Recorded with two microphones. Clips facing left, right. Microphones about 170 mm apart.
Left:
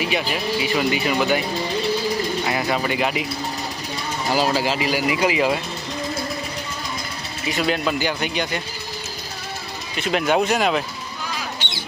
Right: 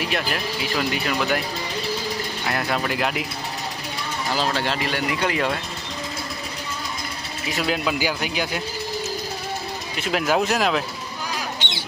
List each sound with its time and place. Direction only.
0.0 s speech: centre (ahead or behind)
2.5 s speech: centre (ahead or behind)
4.3 s speech: 10° left (ahead or behind)
7.4 s speech: centre (ahead or behind)
10.0 s speech: centre (ahead or behind)
11.6 s a sound: 20° right (ahead or behind)